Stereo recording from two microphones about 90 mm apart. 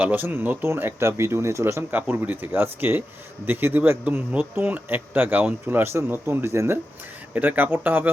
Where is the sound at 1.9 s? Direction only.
20° right (ahead or behind).